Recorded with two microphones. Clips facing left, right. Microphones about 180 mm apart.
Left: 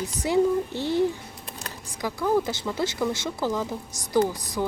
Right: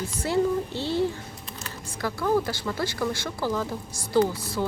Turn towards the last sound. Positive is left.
turn(degrees=15)  # may be behind; listen again after turning